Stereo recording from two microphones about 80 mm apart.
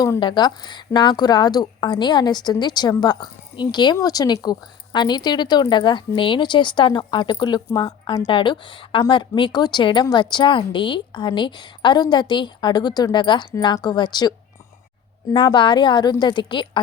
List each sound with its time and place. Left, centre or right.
0.2 s a woman's voice: left
4.0 s speech: left
4.4 s a woman's voice: left
8.3 s a woman's voice: left
9.0 s a woman's voice: left
13.8 s a woman's voice: left
15.5 s a woman's voice: left